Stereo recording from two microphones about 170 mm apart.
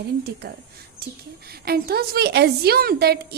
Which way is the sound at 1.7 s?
65° right (ahead or behind).